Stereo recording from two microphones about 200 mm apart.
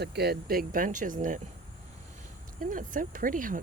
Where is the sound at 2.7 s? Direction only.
40° right (ahead or behind).